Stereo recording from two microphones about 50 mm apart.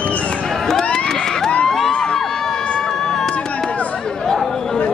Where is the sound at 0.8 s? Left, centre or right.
Centre.